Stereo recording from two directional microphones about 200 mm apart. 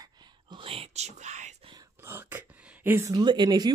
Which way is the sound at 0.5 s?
25° right (ahead or behind).